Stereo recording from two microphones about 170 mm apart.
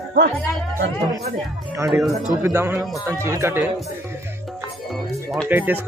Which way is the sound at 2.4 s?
15° right (ahead or behind).